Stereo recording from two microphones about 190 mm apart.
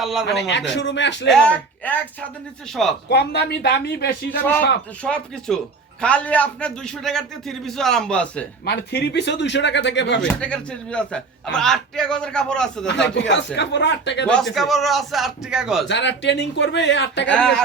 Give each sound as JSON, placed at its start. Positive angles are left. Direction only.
{"t": 0.0, "sound": "speech", "side_deg": 0}
{"t": 0.5, "sound": "speech", "side_deg": 70}
{"t": 1.3, "sound": "speech", "side_deg": 5}
{"t": 3.1, "sound": "speech", "side_deg": 60}
{"t": 5.0, "sound": "speech", "side_deg": 5}
{"t": 8.6, "sound": "speech", "side_deg": 55}
{"t": 10.2, "sound": "speech", "side_deg": 5}
{"t": 13.1, "sound": "speech", "side_deg": 70}
{"t": 14.3, "sound": "speech", "side_deg": 0}
{"t": 15.9, "sound": "speech", "side_deg": 70}
{"t": 17.2, "sound": "speech", "side_deg": 5}